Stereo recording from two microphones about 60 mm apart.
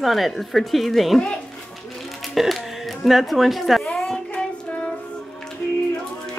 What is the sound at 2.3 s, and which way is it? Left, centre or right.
Speech, centre.